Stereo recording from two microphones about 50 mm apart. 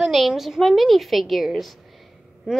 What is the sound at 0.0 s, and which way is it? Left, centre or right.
A woman's voice, centre.